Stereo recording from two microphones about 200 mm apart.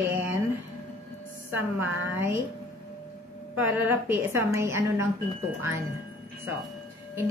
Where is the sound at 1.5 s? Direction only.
10° right (ahead or behind).